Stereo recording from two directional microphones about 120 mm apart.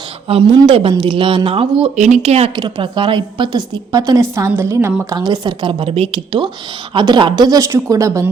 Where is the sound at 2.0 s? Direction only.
70° right (ahead or behind).